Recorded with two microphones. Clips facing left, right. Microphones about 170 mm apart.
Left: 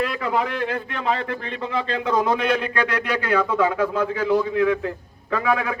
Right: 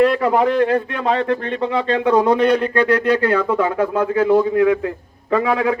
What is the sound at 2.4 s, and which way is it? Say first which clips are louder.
Speech: right 7 dB; 35° right (ahead or behind).